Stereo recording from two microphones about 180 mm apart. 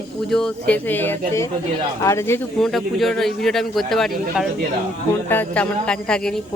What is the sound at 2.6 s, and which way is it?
A man's voice, centre (ahead or behind).